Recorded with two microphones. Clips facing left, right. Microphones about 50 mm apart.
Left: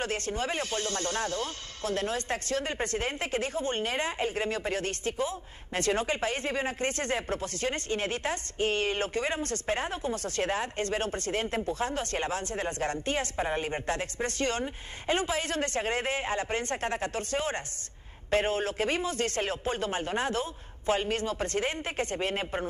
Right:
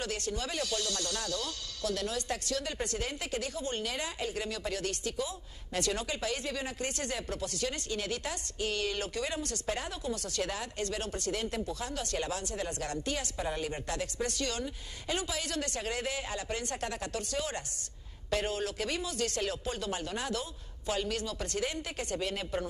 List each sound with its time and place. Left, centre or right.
0.0 s speech: left